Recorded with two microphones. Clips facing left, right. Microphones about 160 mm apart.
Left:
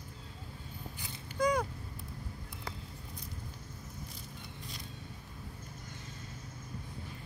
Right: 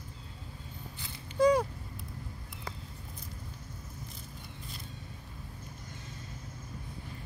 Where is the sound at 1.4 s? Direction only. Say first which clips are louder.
Right 6 dB; 30° right (ahead or behind).